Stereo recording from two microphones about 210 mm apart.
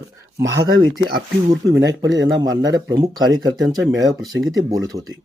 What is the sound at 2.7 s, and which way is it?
Speech, 60° right (ahead or behind).